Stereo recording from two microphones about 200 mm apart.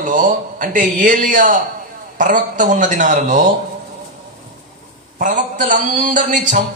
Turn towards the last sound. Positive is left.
turn(degrees=-40)  # may be behind; listen again after turning